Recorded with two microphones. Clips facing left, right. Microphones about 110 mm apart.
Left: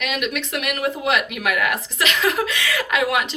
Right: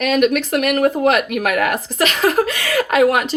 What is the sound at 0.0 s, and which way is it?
Speech, 45° right (ahead or behind).